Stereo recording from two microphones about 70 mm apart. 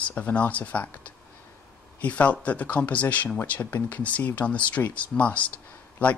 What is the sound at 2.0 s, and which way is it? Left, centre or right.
Speech, left.